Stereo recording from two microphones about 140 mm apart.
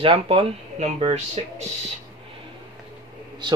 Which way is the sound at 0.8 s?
50° right (ahead or behind).